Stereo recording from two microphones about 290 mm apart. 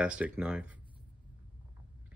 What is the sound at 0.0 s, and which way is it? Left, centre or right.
Speech, centre.